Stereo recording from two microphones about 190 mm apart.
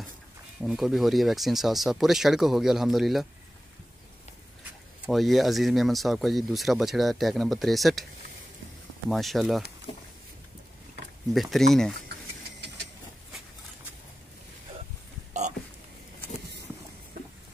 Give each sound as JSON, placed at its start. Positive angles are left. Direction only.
{"t": 0.6, "sound": "speech", "side_deg": 0}
{"t": 5.0, "sound": "speech", "side_deg": 0}
{"t": 9.1, "sound": "speech", "side_deg": 0}
{"t": 9.9, "sound": "a sound", "side_deg": 25}
{"t": 11.5, "sound": "speech", "side_deg": 0}